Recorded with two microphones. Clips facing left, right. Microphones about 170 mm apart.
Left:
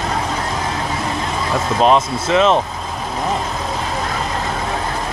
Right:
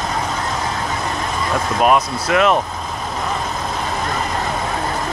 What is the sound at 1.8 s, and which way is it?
Speech, 25° left (ahead or behind).